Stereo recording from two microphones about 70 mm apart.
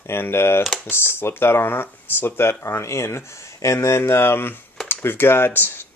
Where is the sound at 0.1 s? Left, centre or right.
Left.